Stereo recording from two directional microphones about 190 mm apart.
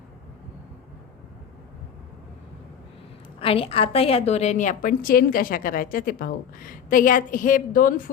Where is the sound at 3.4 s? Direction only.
30° left (ahead or behind).